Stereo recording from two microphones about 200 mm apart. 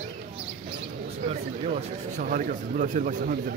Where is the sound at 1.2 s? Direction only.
35° right (ahead or behind).